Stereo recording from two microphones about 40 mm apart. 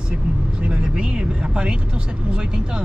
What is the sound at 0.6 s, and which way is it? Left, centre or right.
Speech, right.